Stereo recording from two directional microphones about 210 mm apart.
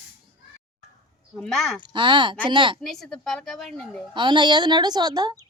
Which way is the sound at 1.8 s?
20° right (ahead or behind).